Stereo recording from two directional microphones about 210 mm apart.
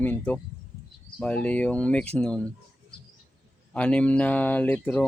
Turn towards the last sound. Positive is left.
turn(degrees=10)  # may be behind; listen again after turning